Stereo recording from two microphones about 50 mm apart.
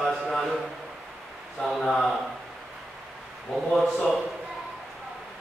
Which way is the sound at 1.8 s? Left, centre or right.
Centre.